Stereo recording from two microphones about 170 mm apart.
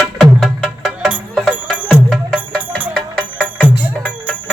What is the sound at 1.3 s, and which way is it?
Music, 5° left (ahead or behind).